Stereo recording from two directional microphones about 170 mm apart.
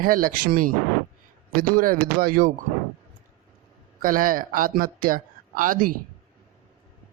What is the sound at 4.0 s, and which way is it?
Speech, 55° right (ahead or behind).